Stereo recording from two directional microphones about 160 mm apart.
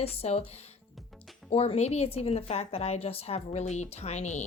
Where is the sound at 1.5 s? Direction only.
35° left (ahead or behind).